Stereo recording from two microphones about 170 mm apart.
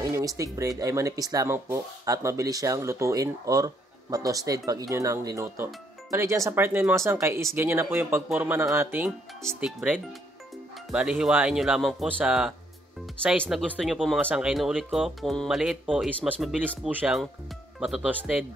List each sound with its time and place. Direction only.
0.0 s speech: 20° right (ahead or behind)